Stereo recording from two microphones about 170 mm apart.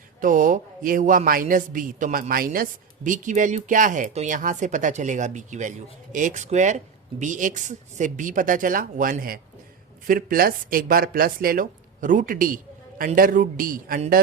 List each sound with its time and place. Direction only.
0.2 s a man's voice: 50° right (ahead or behind)